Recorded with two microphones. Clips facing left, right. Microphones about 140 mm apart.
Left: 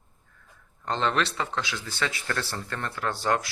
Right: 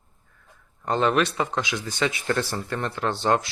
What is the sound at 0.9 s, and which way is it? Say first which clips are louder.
Speech: right 5 dB; 10° right (ahead or behind).